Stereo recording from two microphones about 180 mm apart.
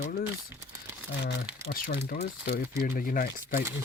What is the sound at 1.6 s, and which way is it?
Speech, 55° left (ahead or behind).